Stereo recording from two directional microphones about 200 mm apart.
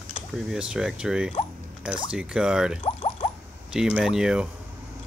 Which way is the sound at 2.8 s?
25° left (ahead or behind).